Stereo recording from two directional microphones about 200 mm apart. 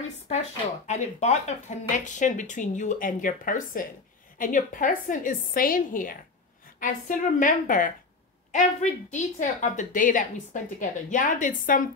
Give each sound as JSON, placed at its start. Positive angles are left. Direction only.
{"t": 0.8, "sound": "a woman's voice", "side_deg": 35}